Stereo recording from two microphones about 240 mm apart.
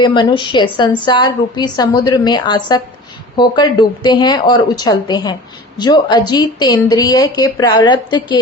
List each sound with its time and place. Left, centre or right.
0.0 s a woman's voice: centre